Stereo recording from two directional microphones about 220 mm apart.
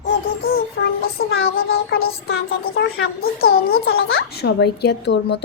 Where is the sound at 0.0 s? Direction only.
45° left (ahead or behind).